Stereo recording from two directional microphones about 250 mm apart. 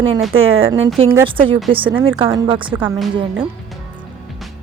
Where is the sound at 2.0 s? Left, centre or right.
Right.